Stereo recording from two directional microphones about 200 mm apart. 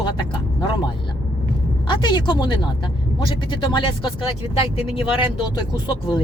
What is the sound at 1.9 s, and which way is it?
Speech, 20° left (ahead or behind).